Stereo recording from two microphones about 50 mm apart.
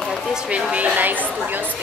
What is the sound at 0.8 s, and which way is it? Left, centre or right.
Speech, right.